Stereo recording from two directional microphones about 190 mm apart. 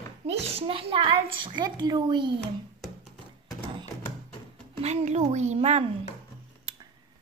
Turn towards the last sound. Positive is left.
turn(degrees=-35)  # may be behind; listen again after turning